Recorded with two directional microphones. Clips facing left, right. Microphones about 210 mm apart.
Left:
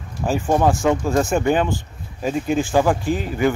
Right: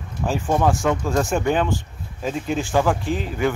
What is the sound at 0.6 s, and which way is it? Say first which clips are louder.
Speech: left 2 dB; 15° left (ahead or behind).